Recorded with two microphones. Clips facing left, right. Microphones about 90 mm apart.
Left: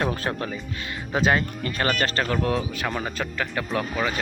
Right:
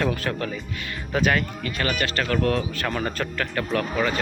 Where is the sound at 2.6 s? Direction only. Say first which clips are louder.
Right 1 dB; 10° left (ahead or behind).